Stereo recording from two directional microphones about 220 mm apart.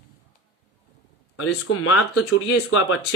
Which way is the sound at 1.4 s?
85° left.